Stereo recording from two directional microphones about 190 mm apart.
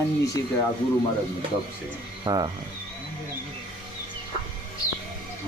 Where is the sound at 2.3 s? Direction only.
20° right (ahead or behind).